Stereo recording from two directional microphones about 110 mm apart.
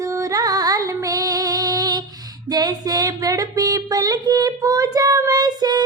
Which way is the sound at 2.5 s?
35° right (ahead or behind).